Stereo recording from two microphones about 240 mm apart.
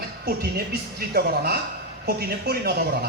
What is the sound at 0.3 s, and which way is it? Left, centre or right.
A man's voice, right.